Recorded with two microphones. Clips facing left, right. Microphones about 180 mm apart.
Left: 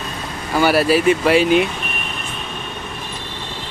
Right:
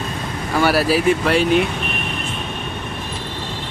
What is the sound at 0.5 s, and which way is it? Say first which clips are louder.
Speech: left 2 dB; centre (ahead or behind).